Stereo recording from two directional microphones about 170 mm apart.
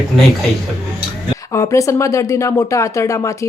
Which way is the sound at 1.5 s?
20° left (ahead or behind).